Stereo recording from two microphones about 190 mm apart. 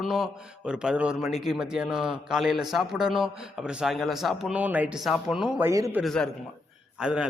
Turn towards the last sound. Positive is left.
turn(degrees=-5)  # may be behind; listen again after turning